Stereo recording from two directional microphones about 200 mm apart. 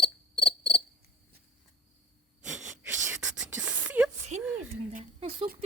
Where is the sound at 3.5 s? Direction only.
10° right (ahead or behind).